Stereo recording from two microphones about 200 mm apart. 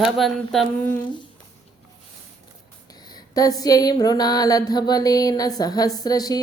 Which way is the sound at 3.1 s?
20° left (ahead or behind).